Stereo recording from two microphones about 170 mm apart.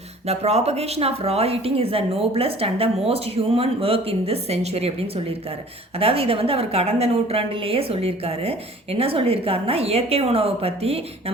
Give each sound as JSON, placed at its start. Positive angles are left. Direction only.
{"t": 0.3, "sound": "speech", "side_deg": -40}